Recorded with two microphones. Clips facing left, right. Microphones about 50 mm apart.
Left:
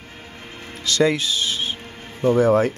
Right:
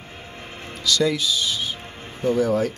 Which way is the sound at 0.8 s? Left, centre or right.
Left.